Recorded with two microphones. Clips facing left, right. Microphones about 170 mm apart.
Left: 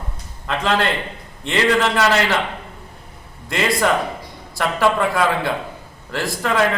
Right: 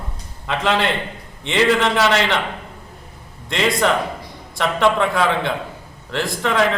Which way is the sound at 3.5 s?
5° left (ahead or behind).